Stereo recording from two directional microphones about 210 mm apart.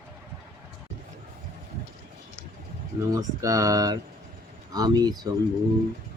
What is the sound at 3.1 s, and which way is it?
Speech, 15° right (ahead or behind).